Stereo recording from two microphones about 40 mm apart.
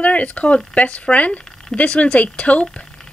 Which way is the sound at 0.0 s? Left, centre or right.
Left.